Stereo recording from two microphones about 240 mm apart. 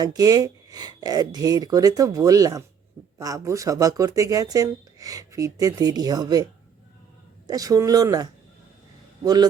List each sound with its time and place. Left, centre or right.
0.0 s speech: centre
7.4 s speech: centre